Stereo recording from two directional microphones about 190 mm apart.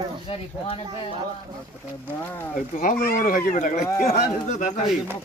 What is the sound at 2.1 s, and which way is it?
Speech, 10° left (ahead or behind).